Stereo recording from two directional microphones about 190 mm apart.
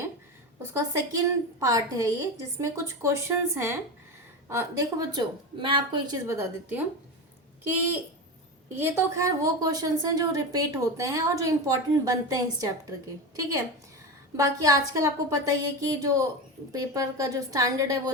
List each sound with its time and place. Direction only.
0.6 s a woman's voice: 15° right (ahead or behind)
8.7 s a woman's voice: 10° right (ahead or behind)
14.3 s a woman's voice: 15° right (ahead or behind)